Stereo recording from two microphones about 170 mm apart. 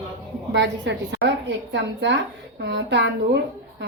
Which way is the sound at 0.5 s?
90° right.